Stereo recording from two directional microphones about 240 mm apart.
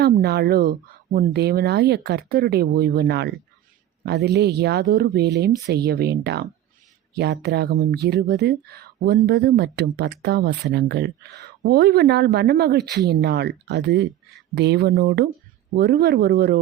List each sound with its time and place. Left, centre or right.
0.0 s speech: right